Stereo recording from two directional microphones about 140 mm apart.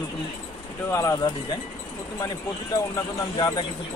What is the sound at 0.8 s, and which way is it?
Speech, 20° left (ahead or behind).